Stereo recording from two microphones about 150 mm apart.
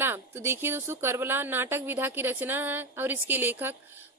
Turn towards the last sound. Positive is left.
turn(degrees=-15)  # may be behind; listen again after turning